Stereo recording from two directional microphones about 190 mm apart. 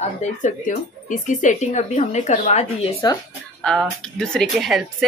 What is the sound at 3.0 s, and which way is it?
Speech, 20° left (ahead or behind).